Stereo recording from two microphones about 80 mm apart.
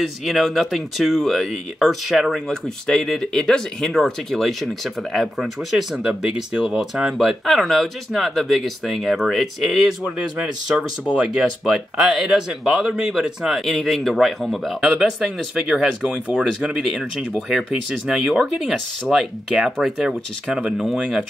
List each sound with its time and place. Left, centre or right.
0.0 s speech: centre
10.0 s speech: centre